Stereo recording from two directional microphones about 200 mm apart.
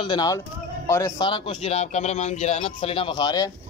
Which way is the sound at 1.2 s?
25° left (ahead or behind).